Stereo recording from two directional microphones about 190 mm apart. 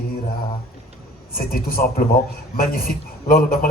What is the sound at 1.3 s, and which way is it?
A man's voice, 50° left (ahead or behind).